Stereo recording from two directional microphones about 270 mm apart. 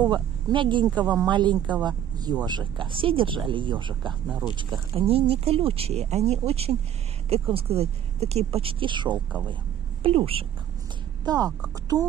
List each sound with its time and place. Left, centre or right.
0.1 s speech: centre
4.1 s speech: centre
4.6 s speech: centre
11.9 s speech: centre